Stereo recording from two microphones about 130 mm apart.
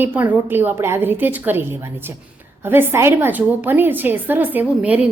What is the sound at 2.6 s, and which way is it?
A woman's voice, 15° right (ahead or behind).